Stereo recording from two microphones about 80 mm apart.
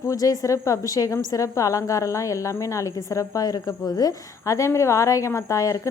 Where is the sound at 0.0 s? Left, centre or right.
Left.